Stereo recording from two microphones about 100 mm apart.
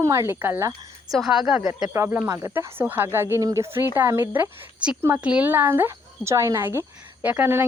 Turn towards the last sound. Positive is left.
turn(degrees=-20)  # may be behind; listen again after turning